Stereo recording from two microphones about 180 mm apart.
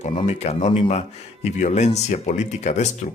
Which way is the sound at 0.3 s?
35° left (ahead or behind).